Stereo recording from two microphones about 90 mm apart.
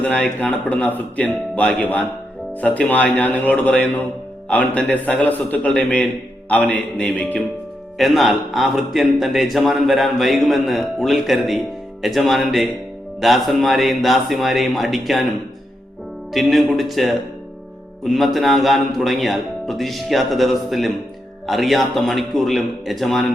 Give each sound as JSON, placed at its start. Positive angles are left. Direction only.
{"t": 0.0, "sound": "a man's voice", "side_deg": 15}
{"t": 7.9, "sound": "a man's voice", "side_deg": 0}
{"t": 16.3, "sound": "a man's voice", "side_deg": 0}